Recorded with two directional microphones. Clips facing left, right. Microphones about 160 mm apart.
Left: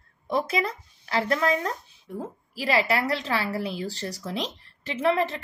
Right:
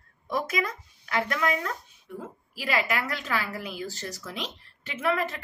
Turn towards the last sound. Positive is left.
turn(degrees=30)  # may be behind; listen again after turning